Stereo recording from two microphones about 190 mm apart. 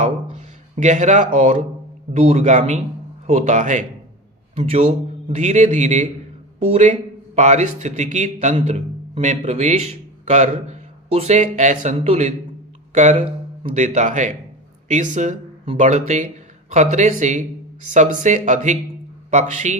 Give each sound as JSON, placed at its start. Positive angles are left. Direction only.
{"t": 0.0, "sound": "speech", "side_deg": -40}